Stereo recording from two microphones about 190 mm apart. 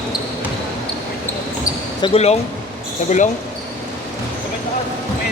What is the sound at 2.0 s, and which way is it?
Speech, 35° left (ahead or behind).